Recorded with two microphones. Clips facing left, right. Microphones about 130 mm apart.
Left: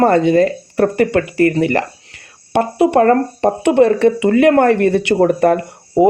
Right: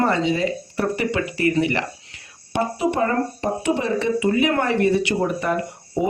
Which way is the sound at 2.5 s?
60° left (ahead or behind).